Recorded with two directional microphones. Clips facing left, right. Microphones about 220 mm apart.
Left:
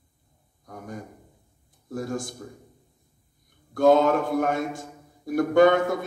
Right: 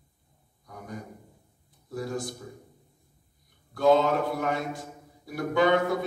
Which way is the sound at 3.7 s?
50° left (ahead or behind).